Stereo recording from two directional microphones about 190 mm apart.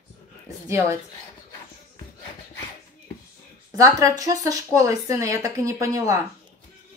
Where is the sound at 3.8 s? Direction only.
15° right (ahead or behind).